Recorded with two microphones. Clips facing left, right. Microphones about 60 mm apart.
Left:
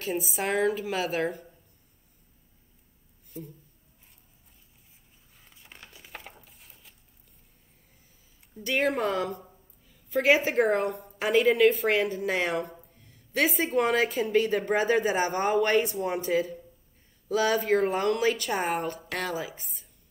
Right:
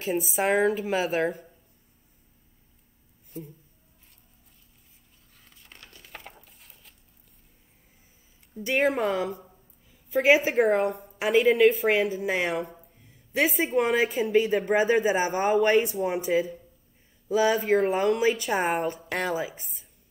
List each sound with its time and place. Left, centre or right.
0.0 s speech: centre
0.4 s a woman's voice: right
0.7 s speech: centre
5.3 s crumpling: centre
8.5 s a woman's voice: centre
19.4 s a woman's voice: right